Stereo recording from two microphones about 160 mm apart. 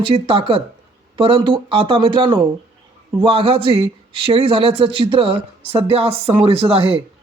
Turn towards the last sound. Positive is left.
turn(degrees=-35)  # may be behind; listen again after turning